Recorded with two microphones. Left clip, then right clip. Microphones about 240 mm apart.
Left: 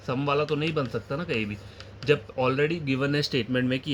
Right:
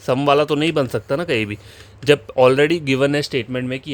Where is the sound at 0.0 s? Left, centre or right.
Right.